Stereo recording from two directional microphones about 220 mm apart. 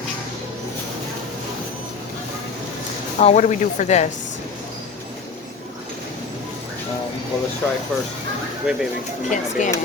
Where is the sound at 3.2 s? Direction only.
35° left (ahead or behind).